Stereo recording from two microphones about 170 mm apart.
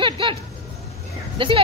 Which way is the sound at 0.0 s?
30° right (ahead or behind).